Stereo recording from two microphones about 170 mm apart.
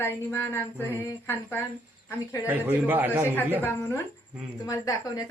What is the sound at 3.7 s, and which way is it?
A woman's voice, 15° left (ahead or behind).